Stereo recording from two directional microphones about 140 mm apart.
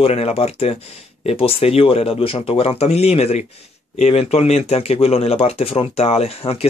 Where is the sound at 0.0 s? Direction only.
45° left (ahead or behind).